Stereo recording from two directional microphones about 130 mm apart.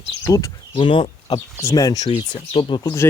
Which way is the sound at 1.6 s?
25° left (ahead or behind).